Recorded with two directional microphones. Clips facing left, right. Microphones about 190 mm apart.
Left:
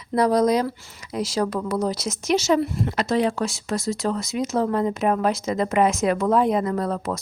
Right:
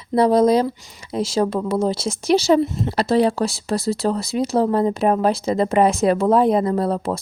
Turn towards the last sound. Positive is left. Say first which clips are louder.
# right 4 dB
turn(degrees=-30)  # may be behind; listen again after turning